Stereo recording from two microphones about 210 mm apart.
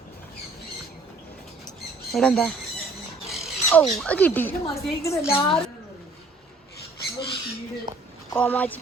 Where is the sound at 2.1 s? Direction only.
Centre (ahead or behind).